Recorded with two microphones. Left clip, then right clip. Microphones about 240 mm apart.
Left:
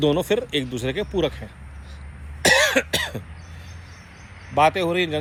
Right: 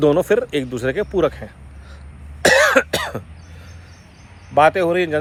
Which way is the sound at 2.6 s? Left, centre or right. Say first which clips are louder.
Right 5 dB; right.